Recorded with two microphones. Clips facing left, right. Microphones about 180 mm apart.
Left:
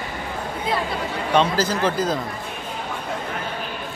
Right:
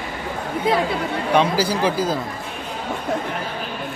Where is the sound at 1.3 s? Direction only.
10° right (ahead or behind).